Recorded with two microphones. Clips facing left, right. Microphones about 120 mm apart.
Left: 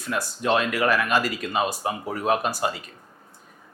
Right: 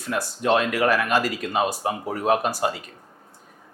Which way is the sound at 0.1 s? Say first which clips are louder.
Right 2 dB; 55° right (ahead or behind).